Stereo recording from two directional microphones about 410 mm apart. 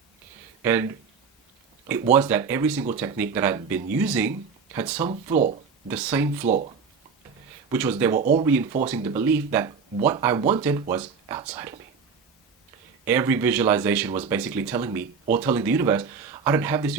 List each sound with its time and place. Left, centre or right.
0.6 s speech: centre
2.1 s speech: centre
5.3 s speech: centre
5.9 s speech: centre
7.7 s speech: centre
8.1 s speech: centre
8.9 s speech: centre
13.1 s speech: centre